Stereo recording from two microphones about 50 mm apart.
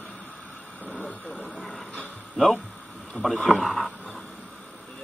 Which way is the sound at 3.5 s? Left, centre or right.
Centre.